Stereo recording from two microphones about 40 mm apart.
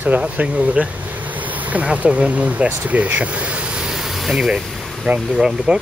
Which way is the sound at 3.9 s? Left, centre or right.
Centre.